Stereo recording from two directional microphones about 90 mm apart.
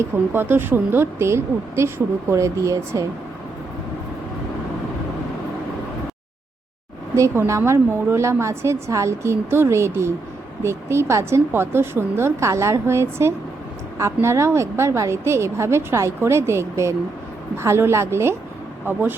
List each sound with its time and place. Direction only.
0.0 s a woman's voice: 25° right (ahead or behind)
7.2 s a woman's voice: 35° right (ahead or behind)